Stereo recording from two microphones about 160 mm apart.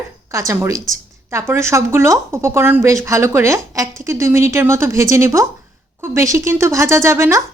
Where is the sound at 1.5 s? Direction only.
15° right (ahead or behind).